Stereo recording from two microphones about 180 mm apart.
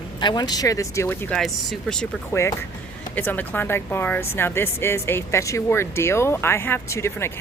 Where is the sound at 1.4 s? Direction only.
Centre (ahead or behind).